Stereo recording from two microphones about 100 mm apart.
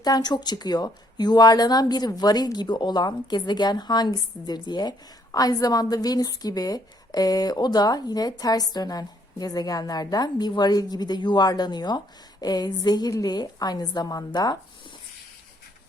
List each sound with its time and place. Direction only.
0.0 s speech: 45° left (ahead or behind)